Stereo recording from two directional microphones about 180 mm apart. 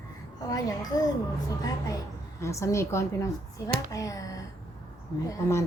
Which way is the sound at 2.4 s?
15° left (ahead or behind).